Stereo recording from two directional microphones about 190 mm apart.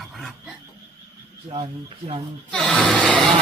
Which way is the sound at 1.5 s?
30° right (ahead or behind).